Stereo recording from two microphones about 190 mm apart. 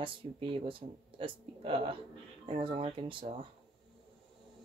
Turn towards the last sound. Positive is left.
turn(degrees=-25)  # may be behind; listen again after turning